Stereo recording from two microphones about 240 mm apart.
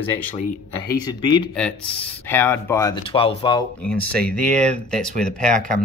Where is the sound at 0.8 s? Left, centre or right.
Centre.